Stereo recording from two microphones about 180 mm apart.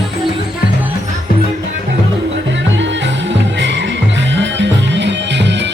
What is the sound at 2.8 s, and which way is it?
Music, 90° right.